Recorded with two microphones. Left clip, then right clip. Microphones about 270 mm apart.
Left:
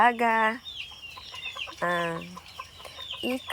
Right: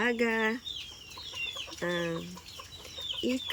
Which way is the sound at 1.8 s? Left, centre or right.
Centre.